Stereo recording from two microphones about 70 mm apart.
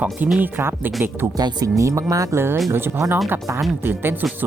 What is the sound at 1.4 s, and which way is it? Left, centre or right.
Speech, right.